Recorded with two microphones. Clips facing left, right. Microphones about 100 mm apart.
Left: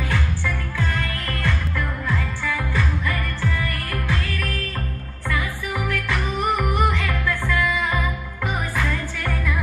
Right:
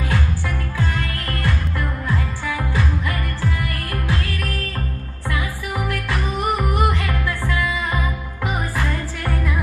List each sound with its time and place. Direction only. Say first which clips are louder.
1.4 s music: right 1 dB; 15° right (ahead or behind)
6.0 s music: even; 10° right (ahead or behind)